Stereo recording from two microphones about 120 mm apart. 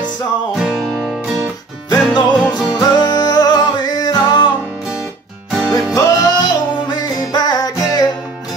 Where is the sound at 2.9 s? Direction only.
35° left (ahead or behind).